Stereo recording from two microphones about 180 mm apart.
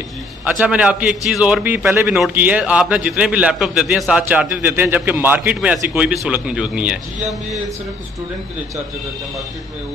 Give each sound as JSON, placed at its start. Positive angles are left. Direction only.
{"t": 0.5, "sound": "a man's voice", "side_deg": -5}